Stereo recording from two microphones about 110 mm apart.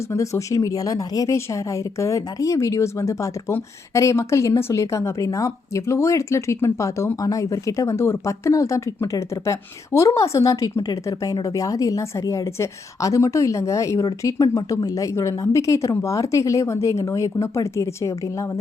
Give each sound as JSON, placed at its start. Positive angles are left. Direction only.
{"t": 0.1, "sound": "speech", "side_deg": 30}